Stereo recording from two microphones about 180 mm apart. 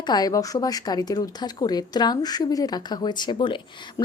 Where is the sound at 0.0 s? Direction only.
20° left (ahead or behind).